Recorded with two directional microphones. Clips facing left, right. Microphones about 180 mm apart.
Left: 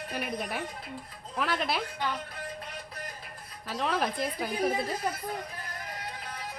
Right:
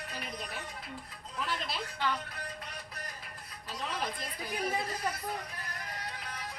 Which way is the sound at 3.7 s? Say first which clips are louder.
Left 7 dB; 80° left.